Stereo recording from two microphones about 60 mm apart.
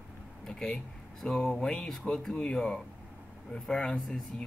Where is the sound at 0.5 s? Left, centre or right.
Centre.